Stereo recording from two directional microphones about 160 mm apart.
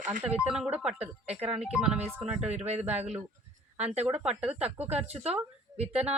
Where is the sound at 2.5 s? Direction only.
45° right (ahead or behind).